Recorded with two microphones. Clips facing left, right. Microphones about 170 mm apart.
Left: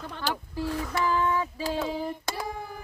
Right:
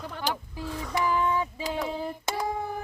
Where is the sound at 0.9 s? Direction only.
15° right (ahead or behind).